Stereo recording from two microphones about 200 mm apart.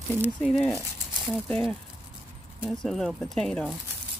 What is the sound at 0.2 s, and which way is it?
Speech, centre (ahead or behind).